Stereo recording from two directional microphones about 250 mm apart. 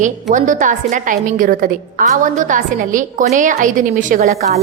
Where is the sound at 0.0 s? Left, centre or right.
Right.